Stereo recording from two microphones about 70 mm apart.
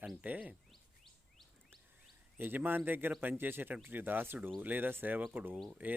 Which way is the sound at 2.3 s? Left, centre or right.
Right.